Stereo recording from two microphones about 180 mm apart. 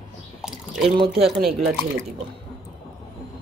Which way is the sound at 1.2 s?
Centre (ahead or behind).